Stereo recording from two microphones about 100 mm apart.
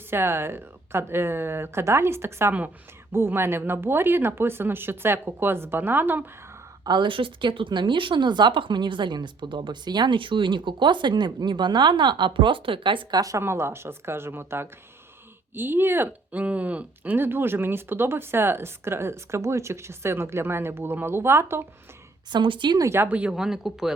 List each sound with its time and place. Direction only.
0.1 s speech: 25° right (ahead or behind)
6.8 s a woman's voice: 50° right (ahead or behind)
13.1 s a woman's voice: 35° right (ahead or behind)
22.3 s a woman's voice: 55° right (ahead or behind)
22.8 s speech: 25° right (ahead or behind)
23.0 s speech: 10° right (ahead or behind)